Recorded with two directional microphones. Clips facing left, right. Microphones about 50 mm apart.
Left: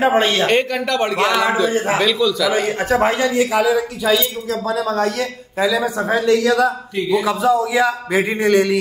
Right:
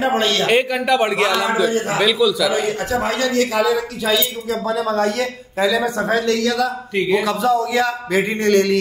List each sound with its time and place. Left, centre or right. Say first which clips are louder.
0.0 s a man's voice: left 3 dB; left
0.5 s a man's voice: right 1 dB; centre
1.3 s a man's voice: left 2 dB; centre
2.0 s speech: right 1 dB; centre
2.9 s speech: left 8 dB; left
3.2 s a man's voice: left 1 dB; centre
4.0 s speech: left 2 dB; centre
6.4 s a man's voice: left 4 dB; left
7.0 s a man's voice: right 1 dB; right
7.2 s a man's voice: left 1 dB; centre